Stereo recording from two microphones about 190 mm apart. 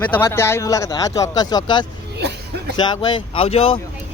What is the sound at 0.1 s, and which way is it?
Speech, 15° left (ahead or behind).